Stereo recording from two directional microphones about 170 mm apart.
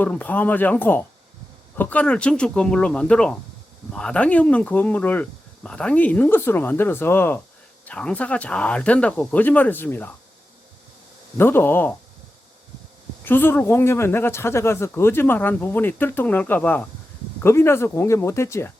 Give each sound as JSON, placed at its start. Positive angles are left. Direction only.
{"t": 0.0, "sound": "speech", "side_deg": 10}
{"t": 11.3, "sound": "speech", "side_deg": 10}
{"t": 13.2, "sound": "speech", "side_deg": 10}